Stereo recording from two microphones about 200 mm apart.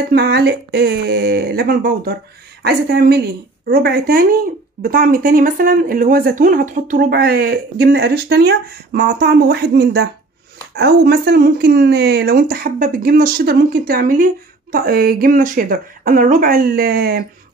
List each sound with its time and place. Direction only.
0.1 s speech: 55° right (ahead or behind)